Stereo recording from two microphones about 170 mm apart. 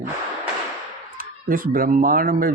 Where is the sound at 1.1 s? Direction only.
55° right (ahead or behind).